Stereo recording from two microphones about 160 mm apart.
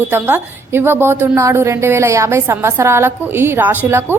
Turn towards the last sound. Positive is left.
turn(degrees=-15)  # may be behind; listen again after turning